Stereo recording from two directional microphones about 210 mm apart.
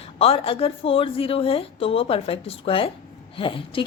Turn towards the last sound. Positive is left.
turn(degrees=25)  # may be behind; listen again after turning